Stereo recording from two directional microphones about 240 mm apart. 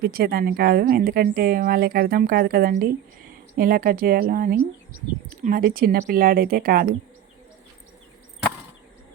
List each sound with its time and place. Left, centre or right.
0.0 s speech: right